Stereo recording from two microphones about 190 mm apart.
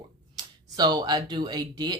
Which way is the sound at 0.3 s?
20° right (ahead or behind).